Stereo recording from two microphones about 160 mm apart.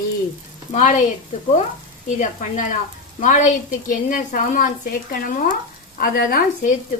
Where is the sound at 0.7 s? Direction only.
55° left (ahead or behind).